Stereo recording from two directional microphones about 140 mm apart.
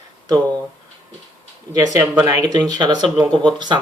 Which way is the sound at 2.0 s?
15° right (ahead or behind).